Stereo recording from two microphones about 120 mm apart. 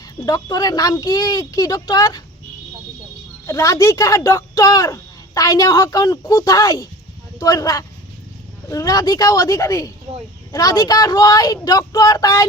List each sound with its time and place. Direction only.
0.2 s speech: 30° left (ahead or behind)
3.4 s speech: 30° left (ahead or behind)